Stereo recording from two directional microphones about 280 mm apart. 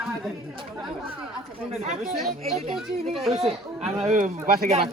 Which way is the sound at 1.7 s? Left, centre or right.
Right.